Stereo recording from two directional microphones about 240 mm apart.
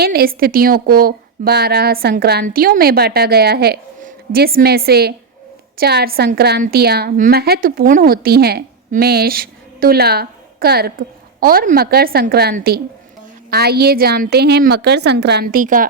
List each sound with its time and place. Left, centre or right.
0.0 s a woman's voice: right